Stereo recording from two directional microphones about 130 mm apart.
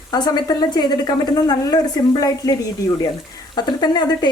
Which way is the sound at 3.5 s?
35° left (ahead or behind).